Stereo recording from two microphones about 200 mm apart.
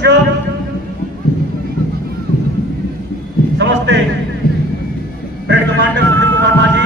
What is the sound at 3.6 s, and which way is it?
Speech, 65° right (ahead or behind).